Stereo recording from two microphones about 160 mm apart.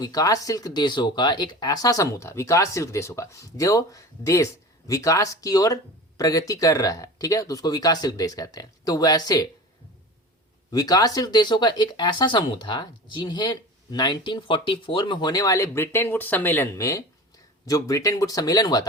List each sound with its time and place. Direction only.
0.0 s speech: 20° left (ahead or behind)
10.7 s speech: 25° left (ahead or behind)